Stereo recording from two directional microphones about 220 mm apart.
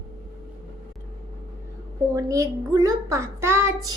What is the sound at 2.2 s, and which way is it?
A child's voice, 15° right (ahead or behind).